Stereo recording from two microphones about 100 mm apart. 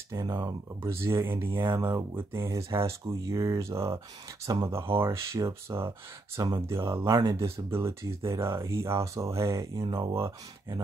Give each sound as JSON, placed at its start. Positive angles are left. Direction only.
{"t": 0.1, "sound": "speech", "side_deg": -35}
{"t": 0.9, "sound": "speech", "side_deg": -25}
{"t": 6.3, "sound": "speech", "side_deg": -40}
{"t": 6.7, "sound": "speech", "side_deg": -25}